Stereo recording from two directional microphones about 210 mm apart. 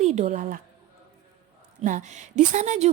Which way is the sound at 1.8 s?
35° right (ahead or behind).